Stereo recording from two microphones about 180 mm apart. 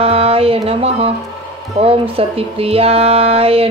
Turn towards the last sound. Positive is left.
turn(degrees=-35)  # may be behind; listen again after turning